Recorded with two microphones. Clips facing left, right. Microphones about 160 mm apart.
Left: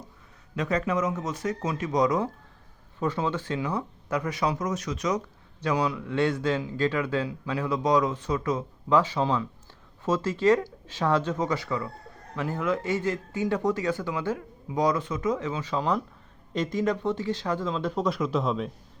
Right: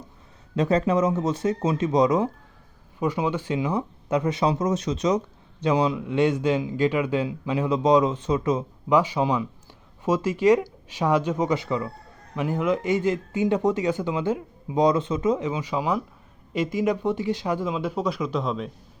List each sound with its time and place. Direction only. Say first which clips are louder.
0.5 s speech: right 5 dB; 30° right (ahead or behind); by 18.7 s centre (ahead or behind)